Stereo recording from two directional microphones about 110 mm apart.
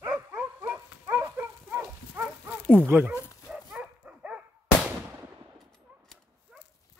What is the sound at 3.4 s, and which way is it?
Dog, 10° right (ahead or behind).